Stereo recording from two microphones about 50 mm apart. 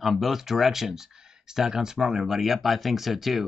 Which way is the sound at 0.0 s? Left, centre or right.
Centre.